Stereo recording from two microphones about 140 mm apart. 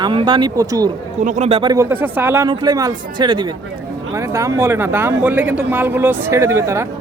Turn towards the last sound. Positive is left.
turn(degrees=-20)  # may be behind; listen again after turning